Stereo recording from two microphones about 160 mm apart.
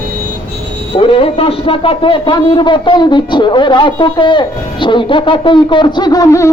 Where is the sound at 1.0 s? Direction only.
35° left (ahead or behind); by 6.5 s 20° left (ahead or behind).